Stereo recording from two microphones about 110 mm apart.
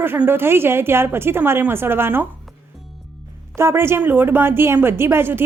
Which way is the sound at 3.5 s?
25° right (ahead or behind).